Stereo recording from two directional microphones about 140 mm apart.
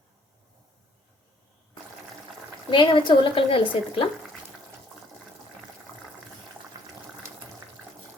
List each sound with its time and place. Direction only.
2.6 s speech: 35° left (ahead or behind)